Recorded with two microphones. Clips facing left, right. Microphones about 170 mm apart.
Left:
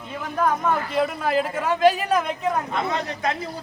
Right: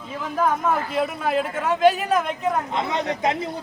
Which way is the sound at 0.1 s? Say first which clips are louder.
Right 1 dB; 5° right (ahead or behind).